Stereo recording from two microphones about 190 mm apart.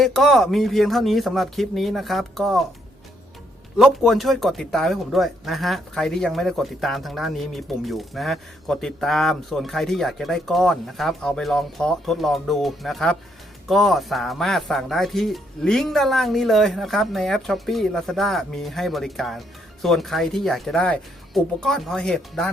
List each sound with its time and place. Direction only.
0.0 s speech: centre (ahead or behind)
3.8 s speech: centre (ahead or behind)